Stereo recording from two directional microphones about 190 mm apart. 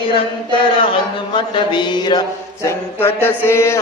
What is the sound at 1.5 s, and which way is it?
Chant, 25° left (ahead or behind).